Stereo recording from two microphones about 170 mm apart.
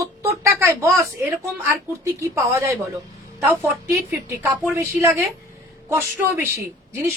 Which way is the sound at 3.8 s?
10° right (ahead or behind).